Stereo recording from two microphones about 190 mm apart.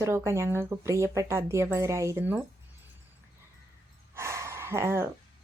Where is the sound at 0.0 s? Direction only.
15° right (ahead or behind).